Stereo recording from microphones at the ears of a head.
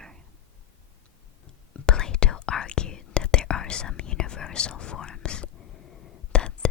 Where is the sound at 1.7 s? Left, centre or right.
Left.